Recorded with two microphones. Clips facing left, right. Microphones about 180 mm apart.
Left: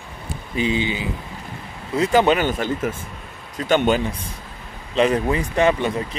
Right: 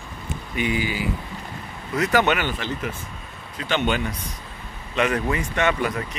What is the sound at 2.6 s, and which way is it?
Speech, 45° left (ahead or behind).